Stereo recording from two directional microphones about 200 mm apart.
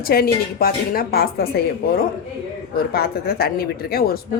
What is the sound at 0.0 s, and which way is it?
A woman's voice, 50° left (ahead or behind).